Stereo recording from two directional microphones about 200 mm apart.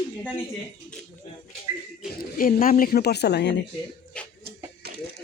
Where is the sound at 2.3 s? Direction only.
45° left (ahead or behind).